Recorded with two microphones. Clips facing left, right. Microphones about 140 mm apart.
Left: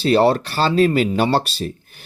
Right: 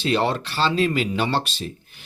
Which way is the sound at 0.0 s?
40° left (ahead or behind).